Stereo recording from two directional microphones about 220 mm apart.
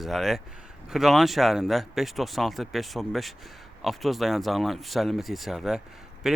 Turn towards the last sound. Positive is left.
turn(degrees=0)  # may be behind; listen again after turning